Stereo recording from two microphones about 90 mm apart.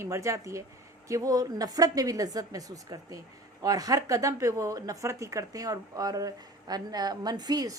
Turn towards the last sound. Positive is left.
turn(degrees=-45)  # may be behind; listen again after turning